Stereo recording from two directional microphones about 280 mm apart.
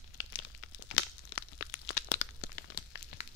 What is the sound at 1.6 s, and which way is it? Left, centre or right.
Crunch, left.